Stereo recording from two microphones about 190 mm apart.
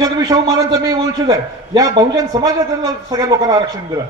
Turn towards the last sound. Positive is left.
turn(degrees=-20)  # may be behind; listen again after turning